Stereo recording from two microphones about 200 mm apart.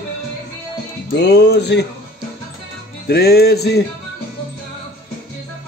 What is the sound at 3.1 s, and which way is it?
Music, 50° left (ahead or behind).